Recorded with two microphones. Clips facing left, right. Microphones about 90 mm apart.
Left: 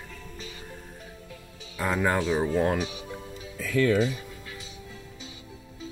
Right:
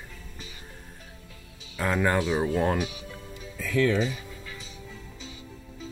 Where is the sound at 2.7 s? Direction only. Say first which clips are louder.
Even; 25° left (ahead or behind).